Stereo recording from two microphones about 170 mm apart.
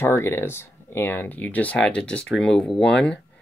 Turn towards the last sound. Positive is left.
turn(degrees=5)  # may be behind; listen again after turning